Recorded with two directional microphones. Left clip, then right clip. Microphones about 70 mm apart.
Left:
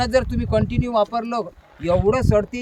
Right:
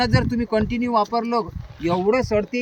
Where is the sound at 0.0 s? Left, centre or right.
Left.